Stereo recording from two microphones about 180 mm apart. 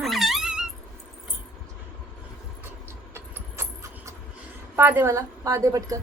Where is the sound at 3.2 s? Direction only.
15° right (ahead or behind).